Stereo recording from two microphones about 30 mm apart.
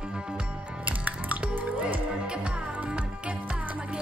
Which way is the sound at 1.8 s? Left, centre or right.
Right.